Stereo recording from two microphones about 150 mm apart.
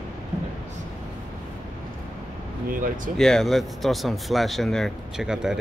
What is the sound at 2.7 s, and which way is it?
Speech, 65° right (ahead or behind).